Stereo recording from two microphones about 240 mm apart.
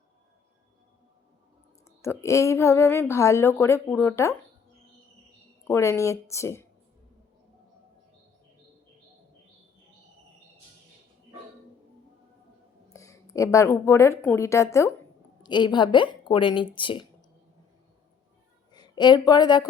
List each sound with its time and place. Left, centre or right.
2.0 s speech: centre
5.6 s speech: centre
12.9 s a woman's voice: centre
18.7 s speech: centre